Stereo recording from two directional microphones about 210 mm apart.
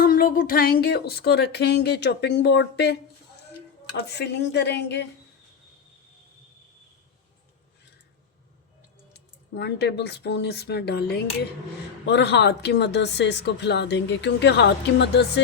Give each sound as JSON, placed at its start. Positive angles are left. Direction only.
{"t": 0.0, "sound": "speech", "side_deg": 45}
{"t": 3.9, "sound": "speech", "side_deg": 55}
{"t": 9.1, "sound": "speech", "side_deg": 55}